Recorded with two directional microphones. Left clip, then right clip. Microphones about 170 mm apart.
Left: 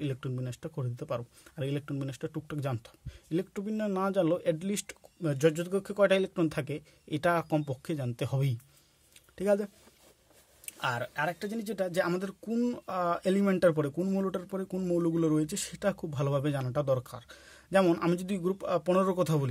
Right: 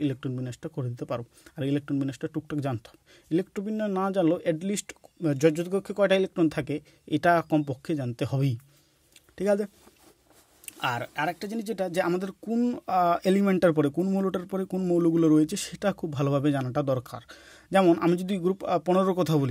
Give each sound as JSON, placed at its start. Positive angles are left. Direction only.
{"t": 0.0, "sound": "speech", "side_deg": -25}